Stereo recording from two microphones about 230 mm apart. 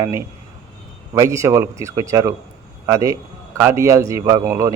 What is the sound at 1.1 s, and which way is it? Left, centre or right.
A man's voice, centre.